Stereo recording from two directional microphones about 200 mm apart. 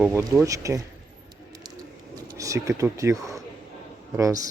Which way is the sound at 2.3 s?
15° right (ahead or behind).